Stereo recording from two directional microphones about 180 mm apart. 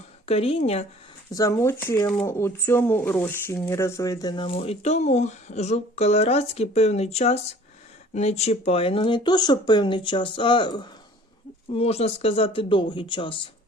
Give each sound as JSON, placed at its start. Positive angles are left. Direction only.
{"t": 0.3, "sound": "a woman's voice", "side_deg": 35}
{"t": 1.3, "sound": "speech", "side_deg": 20}